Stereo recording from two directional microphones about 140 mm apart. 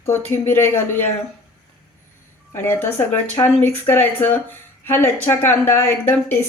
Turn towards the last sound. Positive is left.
turn(degrees=15)  # may be behind; listen again after turning